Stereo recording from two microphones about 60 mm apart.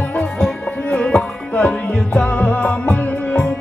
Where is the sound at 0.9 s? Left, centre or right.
Centre.